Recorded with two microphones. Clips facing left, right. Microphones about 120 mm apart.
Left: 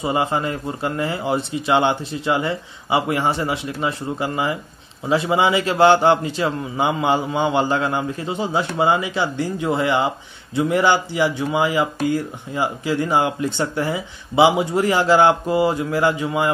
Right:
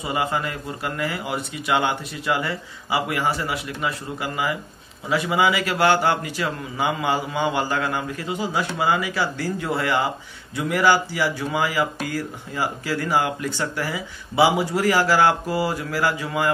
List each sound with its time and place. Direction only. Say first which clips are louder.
0.0 s a man's voice: left 4 dB; 25° left (ahead or behind)